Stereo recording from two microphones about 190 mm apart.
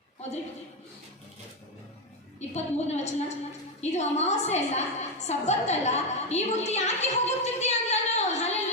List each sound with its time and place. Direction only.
2.5 s a woman's voice: 35° left (ahead or behind)